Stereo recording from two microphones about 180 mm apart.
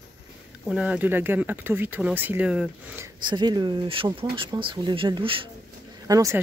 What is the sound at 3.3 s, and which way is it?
Speech, 25° right (ahead or behind).